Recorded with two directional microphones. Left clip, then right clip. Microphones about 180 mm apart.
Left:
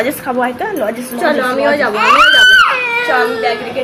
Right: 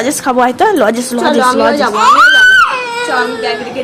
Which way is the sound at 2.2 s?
35° right (ahead or behind).